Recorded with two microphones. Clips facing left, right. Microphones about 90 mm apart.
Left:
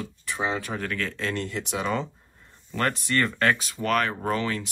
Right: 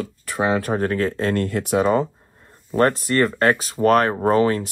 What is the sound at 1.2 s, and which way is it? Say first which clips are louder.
Speech: right 8 dB; 50° right (ahead or behind).